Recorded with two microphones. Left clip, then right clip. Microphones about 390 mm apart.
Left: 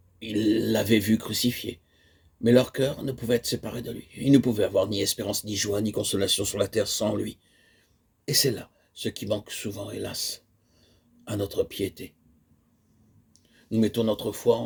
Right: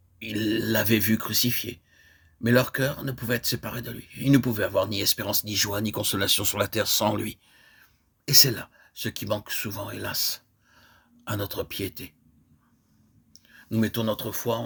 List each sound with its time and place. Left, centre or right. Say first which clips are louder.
0.2 s speech: left 3 dB; right
13.3 s speech: left 2 dB; right